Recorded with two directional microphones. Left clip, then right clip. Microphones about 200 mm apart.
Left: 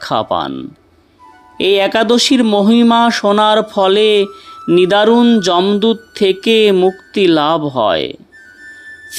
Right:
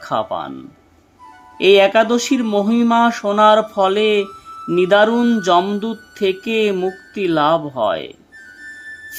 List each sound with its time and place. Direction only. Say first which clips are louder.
0.0 s speech: left 5 dB; 25° left (ahead or behind)
1.5 s speech: right 1 dB; 25° left (ahead or behind)
4.3 s a sound: left 3 dB; centre (ahead or behind)
4.8 s speech: left 2 dB; 25° left (ahead or behind)
8.6 s music: even; centre (ahead or behind)